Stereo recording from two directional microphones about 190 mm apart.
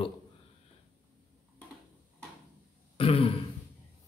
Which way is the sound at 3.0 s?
30° left (ahead or behind).